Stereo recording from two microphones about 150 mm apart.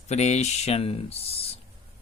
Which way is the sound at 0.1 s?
45° left (ahead or behind).